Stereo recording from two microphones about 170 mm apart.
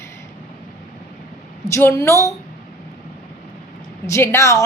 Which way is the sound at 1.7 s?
15° left (ahead or behind).